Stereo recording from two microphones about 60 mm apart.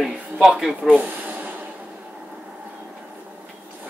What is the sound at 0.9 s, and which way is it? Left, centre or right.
Speech, right.